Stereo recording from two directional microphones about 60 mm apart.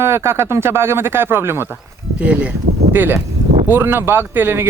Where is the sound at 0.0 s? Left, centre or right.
Right.